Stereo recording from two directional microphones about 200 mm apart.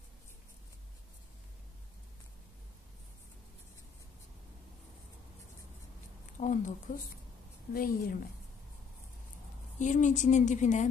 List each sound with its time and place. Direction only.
6.4 s speech: 40° left (ahead or behind)
7.7 s a woman's voice: 45° left (ahead or behind)
9.8 s a woman's voice: 40° left (ahead or behind)